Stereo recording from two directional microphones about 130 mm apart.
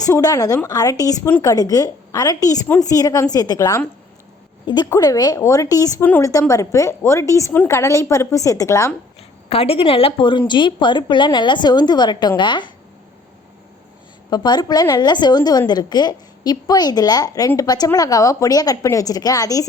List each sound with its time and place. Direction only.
0.0 s a woman's voice: 30° left (ahead or behind)
7.5 s a woman's voice: 15° left (ahead or behind)
7.8 s a woman's voice: 25° left (ahead or behind)
9.5 s a woman's voice: 50° left (ahead or behind)
14.3 s a woman's voice: 30° left (ahead or behind)